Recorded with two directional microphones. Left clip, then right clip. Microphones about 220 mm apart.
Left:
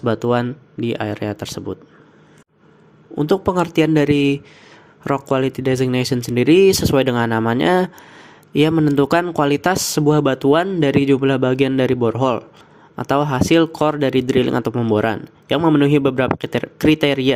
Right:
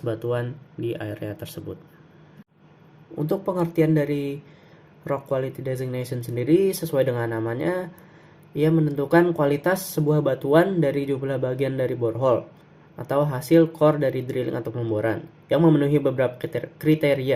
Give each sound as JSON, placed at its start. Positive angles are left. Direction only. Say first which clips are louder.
{"t": 0.0, "sound": "speech", "louder": "left 8 dB", "side_deg": 40}
{"t": 3.2, "sound": "speech", "louder": "left 8 dB", "side_deg": 40}